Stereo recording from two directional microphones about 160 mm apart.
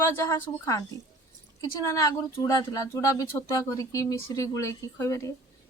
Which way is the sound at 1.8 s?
20° left (ahead or behind).